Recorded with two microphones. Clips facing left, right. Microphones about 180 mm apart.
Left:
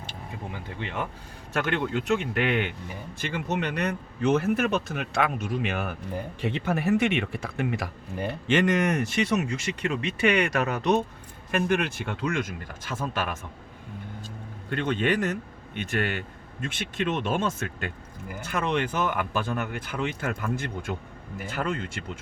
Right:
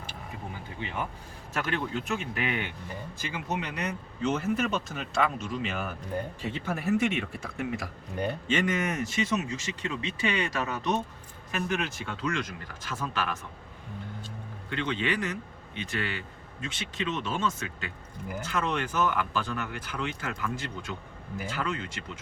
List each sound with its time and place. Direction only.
1.7 s speech: 65° left (ahead or behind)
8.1 s speech: 5° left (ahead or behind)
8.4 s speech: 75° left (ahead or behind); by 13.4 s 50° left (ahead or behind)
14.7 s speech: 50° left (ahead or behind)